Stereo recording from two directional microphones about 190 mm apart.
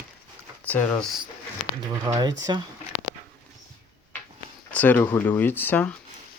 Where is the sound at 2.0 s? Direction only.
20° right (ahead or behind).